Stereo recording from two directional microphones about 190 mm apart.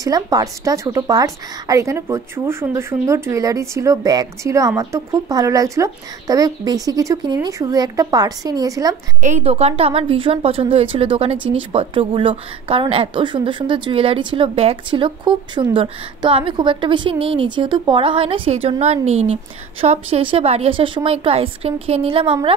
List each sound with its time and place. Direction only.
0.0 s a woman's voice: 20° right (ahead or behind)
9.2 s a woman's voice: 35° right (ahead or behind)